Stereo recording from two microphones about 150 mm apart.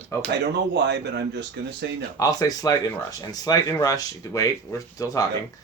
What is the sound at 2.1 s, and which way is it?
Speech, 25° left (ahead or behind).